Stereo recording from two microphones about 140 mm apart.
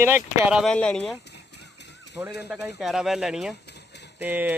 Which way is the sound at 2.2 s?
10° right (ahead or behind).